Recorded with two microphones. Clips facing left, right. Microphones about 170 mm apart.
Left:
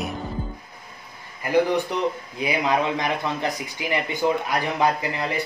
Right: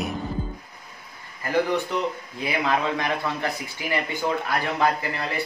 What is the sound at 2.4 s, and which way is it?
Speech, 20° left (ahead or behind).